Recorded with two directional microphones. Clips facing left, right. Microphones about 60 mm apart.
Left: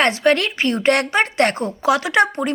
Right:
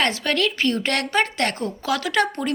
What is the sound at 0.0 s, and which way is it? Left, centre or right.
Speech, left.